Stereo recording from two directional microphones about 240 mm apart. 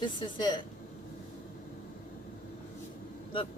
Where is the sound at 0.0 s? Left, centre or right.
Centre.